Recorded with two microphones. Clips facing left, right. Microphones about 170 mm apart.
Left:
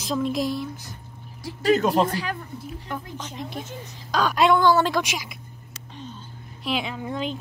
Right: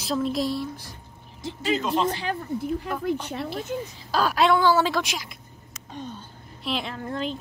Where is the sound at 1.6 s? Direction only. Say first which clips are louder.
Left 5 dB; 50° left (ahead or behind).